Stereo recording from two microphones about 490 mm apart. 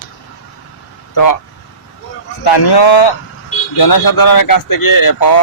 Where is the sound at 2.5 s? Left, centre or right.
Left.